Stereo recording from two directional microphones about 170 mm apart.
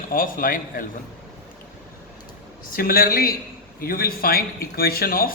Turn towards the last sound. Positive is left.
turn(degrees=60)  # may be behind; listen again after turning